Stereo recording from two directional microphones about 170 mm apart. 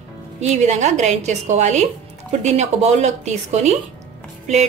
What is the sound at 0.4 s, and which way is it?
A woman's voice, 40° right (ahead or behind).